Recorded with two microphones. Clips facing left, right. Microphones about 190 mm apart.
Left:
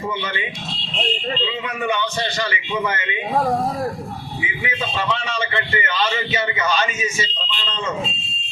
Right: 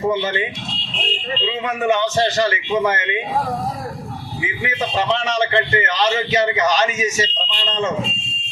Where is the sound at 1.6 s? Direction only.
45° right (ahead or behind).